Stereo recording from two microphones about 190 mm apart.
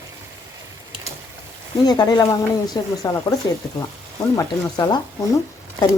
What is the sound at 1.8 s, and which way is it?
Speech, 20° left (ahead or behind).